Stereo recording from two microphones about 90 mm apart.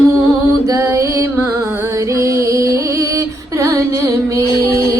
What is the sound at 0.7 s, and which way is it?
Music, 30° right (ahead or behind).